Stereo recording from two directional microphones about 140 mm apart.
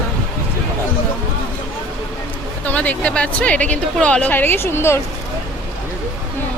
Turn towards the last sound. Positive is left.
turn(degrees=20)  # may be behind; listen again after turning